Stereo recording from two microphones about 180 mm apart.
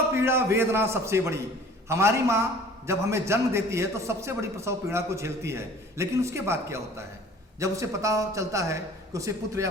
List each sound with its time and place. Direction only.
0.2 s a man's voice: 15° right (ahead or behind)